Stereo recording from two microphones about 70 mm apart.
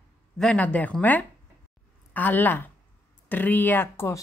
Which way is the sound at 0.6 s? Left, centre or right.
Left.